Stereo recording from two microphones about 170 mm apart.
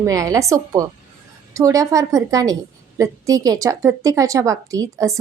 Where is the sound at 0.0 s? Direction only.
20° right (ahead or behind).